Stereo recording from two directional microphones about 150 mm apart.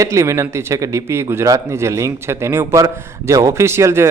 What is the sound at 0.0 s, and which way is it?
A man's voice, 20° right (ahead or behind).